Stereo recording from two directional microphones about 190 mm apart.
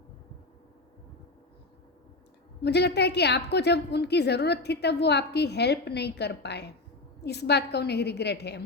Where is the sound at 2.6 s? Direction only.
60° left (ahead or behind).